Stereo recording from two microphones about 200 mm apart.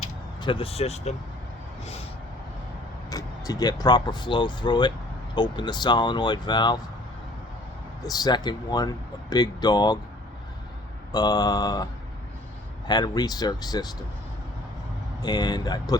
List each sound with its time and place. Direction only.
0.4 s speech: 25° left (ahead or behind)
3.1 s speech: 20° left (ahead or behind)
8.0 s speech: 20° left (ahead or behind)
11.1 s speech: 20° left (ahead or behind)
12.9 s speech: 20° left (ahead or behind)
15.2 s speech: 20° left (ahead or behind)